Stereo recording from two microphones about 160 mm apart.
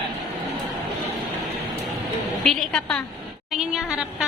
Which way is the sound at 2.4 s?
5° left (ahead or behind).